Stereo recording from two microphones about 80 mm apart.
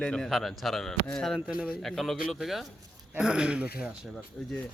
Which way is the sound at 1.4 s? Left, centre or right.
Centre.